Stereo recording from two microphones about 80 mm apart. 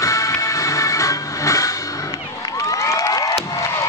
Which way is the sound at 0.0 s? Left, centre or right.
Left.